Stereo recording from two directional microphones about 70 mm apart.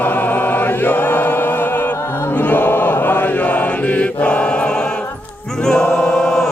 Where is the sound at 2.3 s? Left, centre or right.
Left.